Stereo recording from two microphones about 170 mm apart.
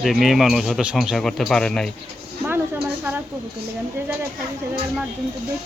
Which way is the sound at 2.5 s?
10° right (ahead or behind).